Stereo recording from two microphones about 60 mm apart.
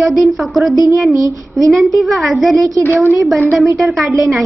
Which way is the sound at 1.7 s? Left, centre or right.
Centre.